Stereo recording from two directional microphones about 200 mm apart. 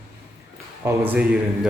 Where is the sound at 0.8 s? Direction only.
10° right (ahead or behind).